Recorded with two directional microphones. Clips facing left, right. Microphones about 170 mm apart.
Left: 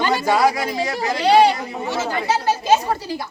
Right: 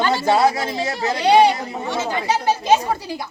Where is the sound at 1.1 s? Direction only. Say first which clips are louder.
Even; 20° right (ahead or behind).